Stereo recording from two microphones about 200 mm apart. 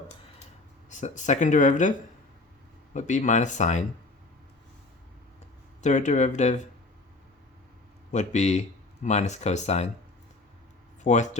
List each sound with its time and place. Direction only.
0.9 s speech: 40° left (ahead or behind)
2.9 s speech: 40° left (ahead or behind)
5.8 s speech: 35° left (ahead or behind)
8.1 s speech: 35° left (ahead or behind)
11.0 s speech: 35° left (ahead or behind)